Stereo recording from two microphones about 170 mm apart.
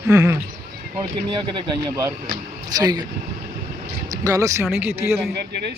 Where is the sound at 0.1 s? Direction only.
15° right (ahead or behind).